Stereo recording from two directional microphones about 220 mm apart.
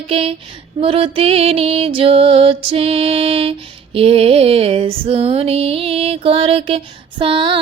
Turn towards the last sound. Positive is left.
turn(degrees=-25)  # may be behind; listen again after turning